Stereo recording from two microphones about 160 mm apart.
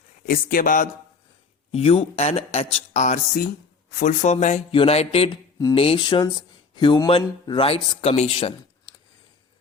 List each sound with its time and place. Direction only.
0.3 s speech: 60° left (ahead or behind)
1.7 s speech: 35° left (ahead or behind)